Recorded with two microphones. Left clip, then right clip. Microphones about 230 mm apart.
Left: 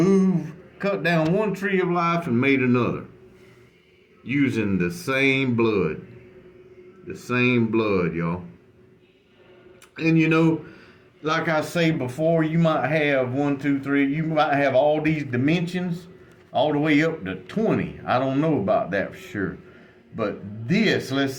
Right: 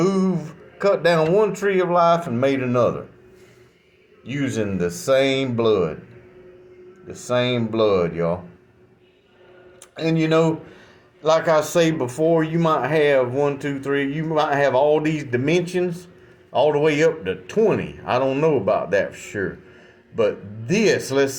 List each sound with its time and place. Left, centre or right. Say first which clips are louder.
0.0 s a sound: even; centre
1.1 s speech: right 5 dB; centre
4.3 s speech: left 1 dB; centre
7.1 s speech: right 1 dB; right
9.9 s speech: right 1 dB; right